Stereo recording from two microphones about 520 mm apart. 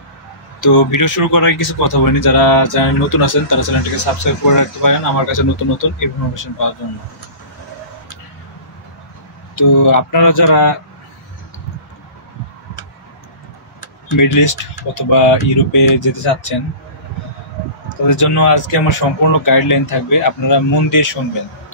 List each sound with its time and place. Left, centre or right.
0.6 s speech: left
9.6 s speech: left
14.1 s speech: left
18.0 s speech: left